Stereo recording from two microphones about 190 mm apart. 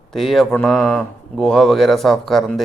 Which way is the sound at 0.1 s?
Centre (ahead or behind).